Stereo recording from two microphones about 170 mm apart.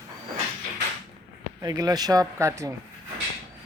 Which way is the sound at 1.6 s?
20° right (ahead or behind).